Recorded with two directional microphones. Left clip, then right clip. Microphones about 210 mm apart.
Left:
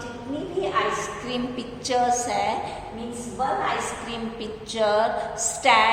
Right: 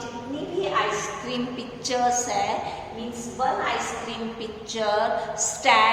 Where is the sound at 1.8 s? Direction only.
15° left (ahead or behind).